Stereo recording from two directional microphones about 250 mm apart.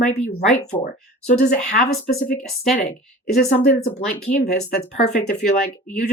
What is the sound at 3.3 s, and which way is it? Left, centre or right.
Speech, left.